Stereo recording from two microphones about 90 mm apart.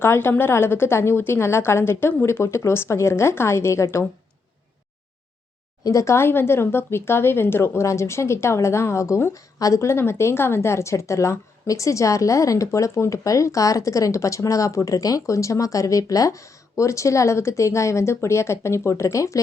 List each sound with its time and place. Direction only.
0.0 s a woman's voice: 25° left (ahead or behind)
5.8 s speech: 35° left (ahead or behind)